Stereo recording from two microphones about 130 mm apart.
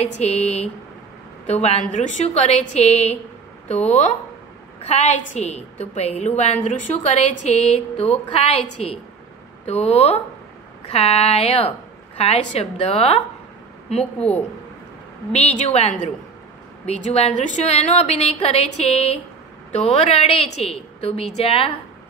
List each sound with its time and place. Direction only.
0.0 s a woman's voice: 55° left (ahead or behind)
15.3 s a woman's voice: 55° left (ahead or behind)
17.4 s a woman's voice: 65° left (ahead or behind); by 21.7 s 45° left (ahead or behind)